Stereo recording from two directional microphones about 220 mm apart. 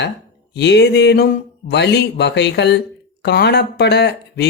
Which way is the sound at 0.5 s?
50° left (ahead or behind).